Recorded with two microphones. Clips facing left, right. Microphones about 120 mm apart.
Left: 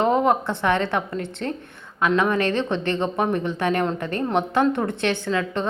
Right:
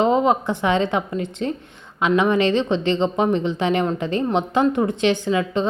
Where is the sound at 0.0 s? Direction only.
20° right (ahead or behind).